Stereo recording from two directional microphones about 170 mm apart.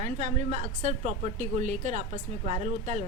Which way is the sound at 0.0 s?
45° right (ahead or behind).